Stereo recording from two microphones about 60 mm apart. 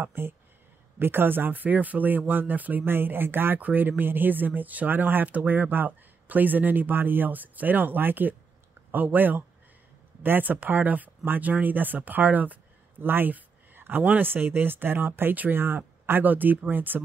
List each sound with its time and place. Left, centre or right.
0.0 s speech: right